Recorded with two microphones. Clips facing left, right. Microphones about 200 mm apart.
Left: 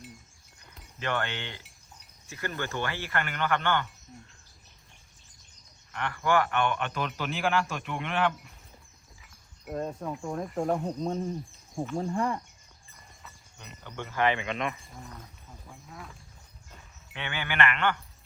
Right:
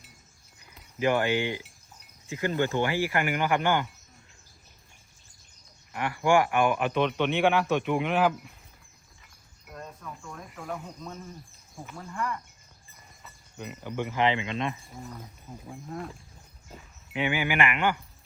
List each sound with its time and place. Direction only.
0.6 s speech: 10° right (ahead or behind)
5.9 s speech: 10° right (ahead or behind)
9.6 s speech: 35° left (ahead or behind)
13.2 s speech: 5° right (ahead or behind)
14.8 s speech: centre (ahead or behind)
16.7 s speech: 10° right (ahead or behind)